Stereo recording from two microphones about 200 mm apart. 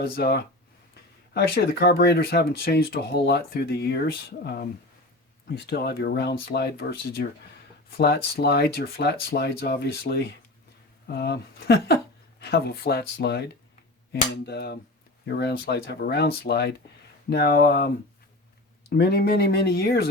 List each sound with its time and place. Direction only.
0.0 s speech: 55° left (ahead or behind)